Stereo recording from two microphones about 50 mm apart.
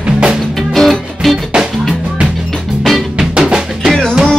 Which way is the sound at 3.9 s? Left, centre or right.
Centre.